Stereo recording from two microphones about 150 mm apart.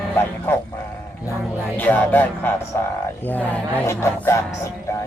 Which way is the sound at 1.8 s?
10° left (ahead or behind).